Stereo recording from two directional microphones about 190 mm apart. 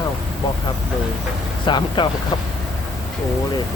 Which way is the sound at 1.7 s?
25° left (ahead or behind).